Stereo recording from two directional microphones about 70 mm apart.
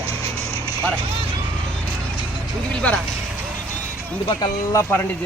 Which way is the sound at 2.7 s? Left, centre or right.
Centre.